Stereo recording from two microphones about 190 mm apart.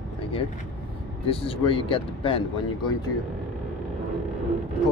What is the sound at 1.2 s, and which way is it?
Speech, 30° left (ahead or behind).